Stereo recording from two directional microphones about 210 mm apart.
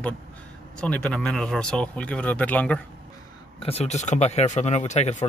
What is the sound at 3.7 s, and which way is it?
Speech, 30° left (ahead or behind).